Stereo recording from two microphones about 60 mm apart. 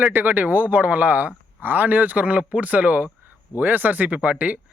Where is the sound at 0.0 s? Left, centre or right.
Right.